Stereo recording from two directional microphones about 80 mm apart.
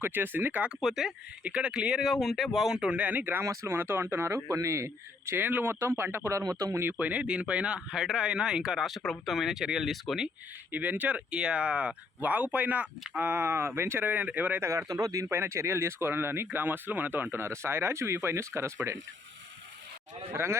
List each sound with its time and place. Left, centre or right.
0.0 s speech: right
0.8 s speech: centre
2.2 s speech: centre; by 3.4 s right
3.4 s speech: right
4.4 s speech: right
6.4 s speech: right
7.0 s speech: centre
10.7 s speech: right
14.6 s speech: right
14.8 s speech: right
15.3 s speech: right
20.3 s speech: right